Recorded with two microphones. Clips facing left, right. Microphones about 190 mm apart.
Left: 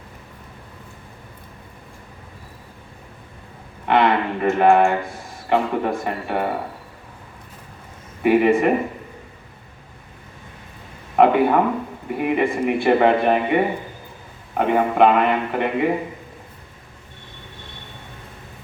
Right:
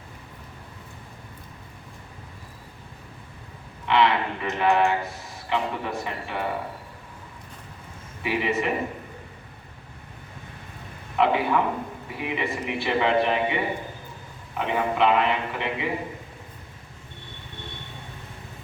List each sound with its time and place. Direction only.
3.8 s a man's voice: 50° left (ahead or behind)
8.2 s a man's voice: 50° left (ahead or behind)
11.2 s a man's voice: 50° left (ahead or behind)